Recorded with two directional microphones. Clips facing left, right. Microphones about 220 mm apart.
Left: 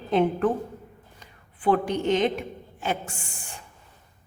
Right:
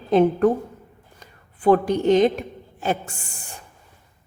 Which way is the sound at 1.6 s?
40° right (ahead or behind).